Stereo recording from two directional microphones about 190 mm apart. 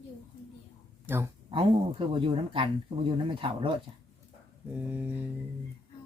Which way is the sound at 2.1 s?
25° right (ahead or behind).